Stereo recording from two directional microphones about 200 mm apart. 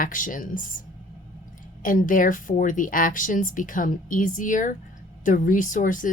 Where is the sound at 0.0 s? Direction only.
40° left (ahead or behind).